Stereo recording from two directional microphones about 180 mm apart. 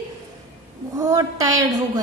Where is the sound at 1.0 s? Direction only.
20° right (ahead or behind).